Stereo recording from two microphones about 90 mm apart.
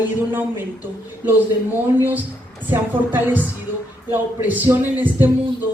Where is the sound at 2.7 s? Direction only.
20° right (ahead or behind).